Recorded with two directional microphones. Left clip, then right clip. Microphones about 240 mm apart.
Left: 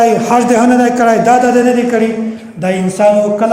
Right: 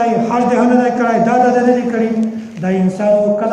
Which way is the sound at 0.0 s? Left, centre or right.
Left.